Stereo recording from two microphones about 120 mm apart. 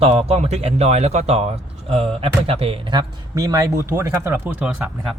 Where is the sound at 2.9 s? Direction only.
35° right (ahead or behind); by 4.7 s 15° right (ahead or behind).